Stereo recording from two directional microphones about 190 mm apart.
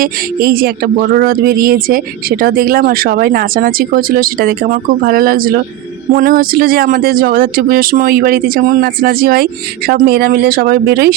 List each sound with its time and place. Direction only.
0.0 s speech: 50° right (ahead or behind)